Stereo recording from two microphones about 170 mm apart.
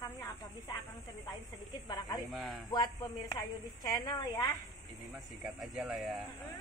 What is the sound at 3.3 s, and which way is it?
A woman's voice, 25° left (ahead or behind).